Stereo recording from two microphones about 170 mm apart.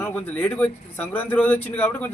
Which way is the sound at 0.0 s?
10° left (ahead or behind).